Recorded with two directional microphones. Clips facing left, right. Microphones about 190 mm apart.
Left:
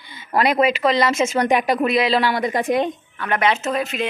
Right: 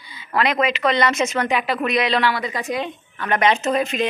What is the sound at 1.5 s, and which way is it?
A woman's voice, 45° left (ahead or behind).